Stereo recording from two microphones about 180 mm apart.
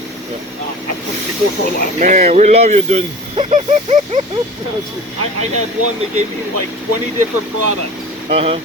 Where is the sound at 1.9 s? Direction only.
40° right (ahead or behind).